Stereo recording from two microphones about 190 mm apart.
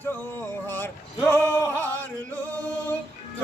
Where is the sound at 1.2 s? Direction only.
10° left (ahead or behind).